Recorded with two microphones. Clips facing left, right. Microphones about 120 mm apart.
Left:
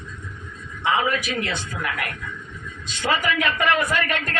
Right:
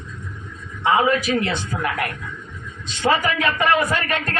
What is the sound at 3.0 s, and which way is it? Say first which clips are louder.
Speech: right 3 dB; 40° right (ahead or behind).